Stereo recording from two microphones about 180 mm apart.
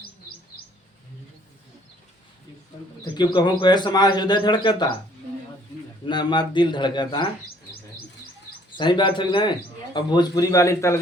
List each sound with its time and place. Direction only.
3.0 s speech: 25° left (ahead or behind)
6.1 s speech: 25° left (ahead or behind)
8.8 s speech: 25° left (ahead or behind)